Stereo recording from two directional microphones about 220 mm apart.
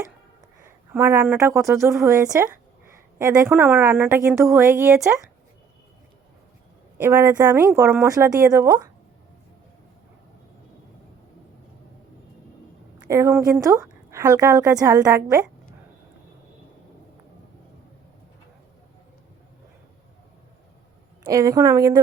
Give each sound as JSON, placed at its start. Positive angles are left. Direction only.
{"t": 0.9, "sound": "a woman's voice", "side_deg": -10}
{"t": 7.0, "sound": "a woman's voice", "side_deg": -10}
{"t": 13.0, "sound": "a woman's voice", "side_deg": -15}
{"t": 21.3, "sound": "a woman's voice", "side_deg": -15}